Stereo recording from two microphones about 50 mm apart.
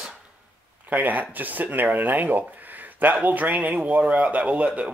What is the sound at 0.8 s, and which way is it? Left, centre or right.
Speech, right.